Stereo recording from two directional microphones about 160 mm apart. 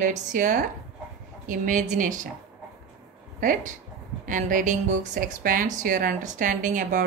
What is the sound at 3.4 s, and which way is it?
Speech, 55° right (ahead or behind).